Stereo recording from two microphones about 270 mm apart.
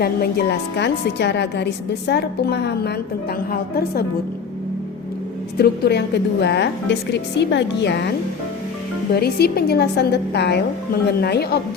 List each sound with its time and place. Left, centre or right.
0.0 s a woman's voice: left
5.5 s a woman's voice: left
9.1 s a woman's voice: left